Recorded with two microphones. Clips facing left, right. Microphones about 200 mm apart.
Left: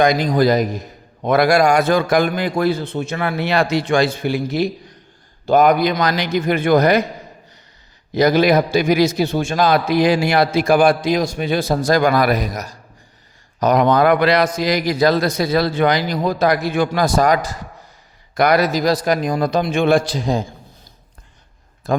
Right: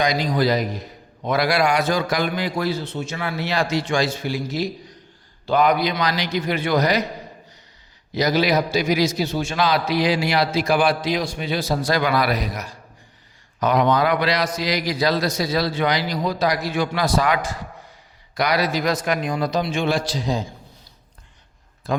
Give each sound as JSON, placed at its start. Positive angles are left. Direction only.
{"t": 0.0, "sound": "a man's voice", "side_deg": 50}
{"t": 5.5, "sound": "a man's voice", "side_deg": 50}
{"t": 8.1, "sound": "a man's voice", "side_deg": 55}
{"t": 18.3, "sound": "a man's voice", "side_deg": 50}
{"t": 21.9, "sound": "a man's voice", "side_deg": 45}